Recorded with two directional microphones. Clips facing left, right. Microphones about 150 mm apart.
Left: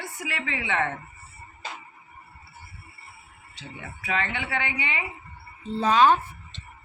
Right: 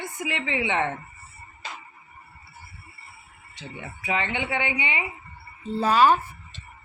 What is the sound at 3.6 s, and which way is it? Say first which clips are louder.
Speech: right 2 dB; 20° right (ahead or behind).